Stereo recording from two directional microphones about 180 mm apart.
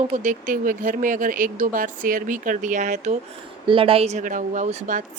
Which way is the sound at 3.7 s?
30° right (ahead or behind).